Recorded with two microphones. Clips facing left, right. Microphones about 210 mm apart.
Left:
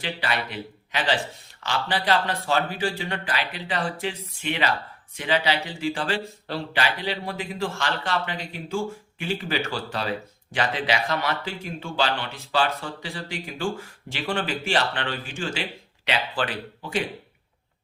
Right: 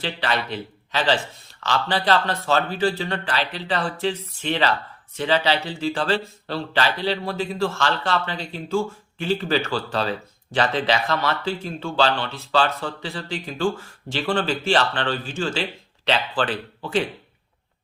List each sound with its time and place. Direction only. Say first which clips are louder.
0.0 s speech: right 3 dB; 15° left (ahead or behind)